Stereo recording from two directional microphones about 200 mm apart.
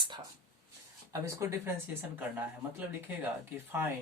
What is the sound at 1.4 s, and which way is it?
Speech, 15° right (ahead or behind).